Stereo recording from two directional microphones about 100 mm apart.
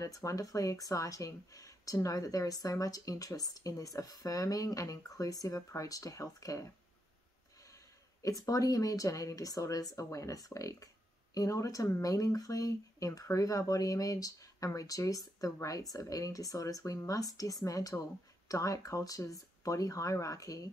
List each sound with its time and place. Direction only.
0.0 s speech: 35° left (ahead or behind)
7.7 s speech: 35° left (ahead or behind)